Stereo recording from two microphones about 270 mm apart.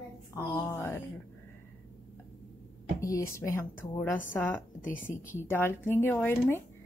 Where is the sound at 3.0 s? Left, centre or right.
Centre.